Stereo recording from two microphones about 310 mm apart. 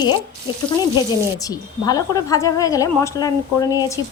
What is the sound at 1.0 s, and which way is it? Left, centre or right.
A woman's voice, centre.